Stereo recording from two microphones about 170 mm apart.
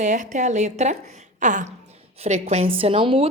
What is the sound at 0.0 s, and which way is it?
A woman's voice, 45° right (ahead or behind).